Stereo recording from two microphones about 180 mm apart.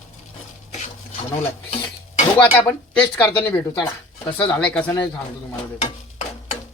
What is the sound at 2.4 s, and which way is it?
Speech, 10° left (ahead or behind).